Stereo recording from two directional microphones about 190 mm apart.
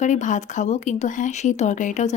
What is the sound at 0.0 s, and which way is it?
Speech, 40° left (ahead or behind).